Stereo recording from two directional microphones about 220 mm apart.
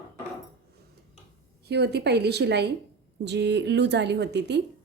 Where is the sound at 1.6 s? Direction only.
50° right (ahead or behind).